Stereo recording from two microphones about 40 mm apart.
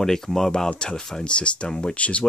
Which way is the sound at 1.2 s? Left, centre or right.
Left.